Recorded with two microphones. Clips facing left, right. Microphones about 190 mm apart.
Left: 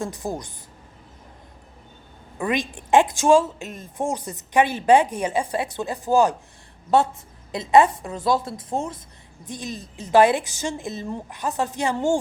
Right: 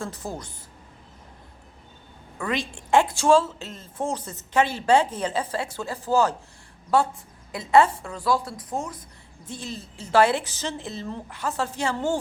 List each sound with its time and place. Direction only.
0.0 s a woman's voice: 15° left (ahead or behind)
2.4 s a woman's voice: 15° left (ahead or behind)